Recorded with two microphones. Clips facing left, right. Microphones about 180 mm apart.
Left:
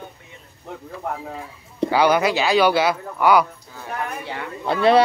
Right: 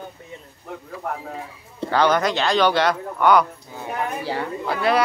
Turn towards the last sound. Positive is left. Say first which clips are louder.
# left 5 dB
turn(degrees=25)  # may be behind; listen again after turning